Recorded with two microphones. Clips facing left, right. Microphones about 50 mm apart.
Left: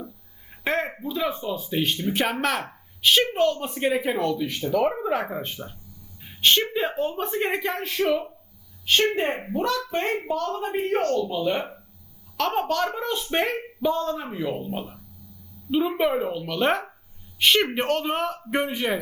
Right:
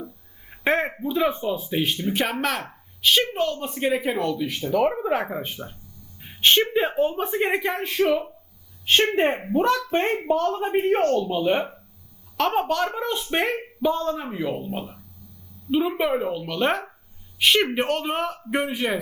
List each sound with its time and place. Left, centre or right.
0.6 s speech: centre
2.1 s a woman's voice: centre
6.4 s speech: right
8.9 s speech: right
12.4 s speech: centre